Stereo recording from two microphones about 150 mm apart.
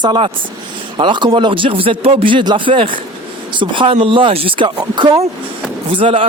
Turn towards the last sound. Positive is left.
turn(degrees=-40)  # may be behind; listen again after turning